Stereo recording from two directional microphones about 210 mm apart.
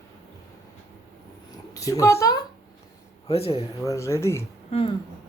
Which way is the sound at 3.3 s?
30° left (ahead or behind).